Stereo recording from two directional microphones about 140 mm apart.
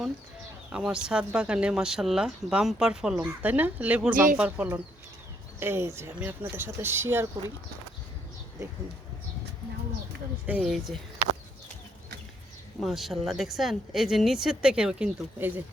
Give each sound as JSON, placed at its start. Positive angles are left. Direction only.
{"t": 0.7, "sound": "speech", "side_deg": -5}
{"t": 4.1, "sound": "speech", "side_deg": -80}
{"t": 4.4, "sound": "speech", "side_deg": -10}
{"t": 10.4, "sound": "speech", "side_deg": -5}
{"t": 12.8, "sound": "speech", "side_deg": 0}